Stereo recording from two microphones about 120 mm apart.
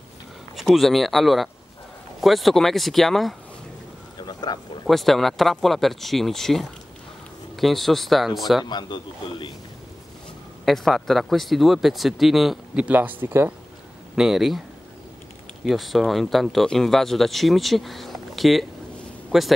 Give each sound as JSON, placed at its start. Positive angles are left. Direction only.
{"t": 0.6, "sound": "speech", "side_deg": 0}
{"t": 4.2, "sound": "speech", "side_deg": 35}
{"t": 4.8, "sound": "speech", "side_deg": 0}
{"t": 8.6, "sound": "a man's voice", "side_deg": 40}
{"t": 10.6, "sound": "speech", "side_deg": 0}
{"t": 14.1, "sound": "speech", "side_deg": -5}
{"t": 15.6, "sound": "speech", "side_deg": 0}